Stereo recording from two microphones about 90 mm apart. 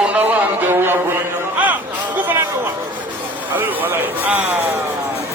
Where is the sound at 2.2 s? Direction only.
20° right (ahead or behind).